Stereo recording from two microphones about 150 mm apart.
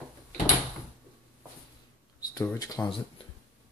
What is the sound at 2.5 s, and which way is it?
Speech, 25° left (ahead or behind).